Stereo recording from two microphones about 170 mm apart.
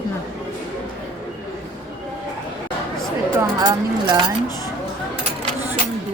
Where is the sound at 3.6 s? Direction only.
25° right (ahead or behind).